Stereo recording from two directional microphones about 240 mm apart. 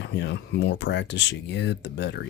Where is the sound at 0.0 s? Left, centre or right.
Left.